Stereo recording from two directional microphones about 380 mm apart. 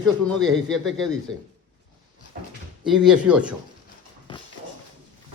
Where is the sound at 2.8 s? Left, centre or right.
Centre.